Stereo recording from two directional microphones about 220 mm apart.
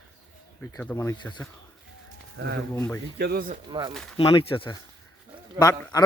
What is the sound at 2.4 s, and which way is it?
Speech, 45° right (ahead or behind).